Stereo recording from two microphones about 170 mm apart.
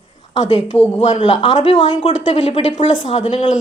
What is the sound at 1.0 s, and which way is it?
A woman's voice, 40° left (ahead or behind).